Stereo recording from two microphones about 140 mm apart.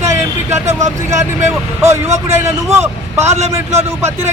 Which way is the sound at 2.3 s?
20° right (ahead or behind).